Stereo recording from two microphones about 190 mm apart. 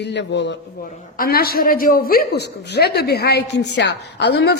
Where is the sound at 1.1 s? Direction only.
50° left (ahead or behind).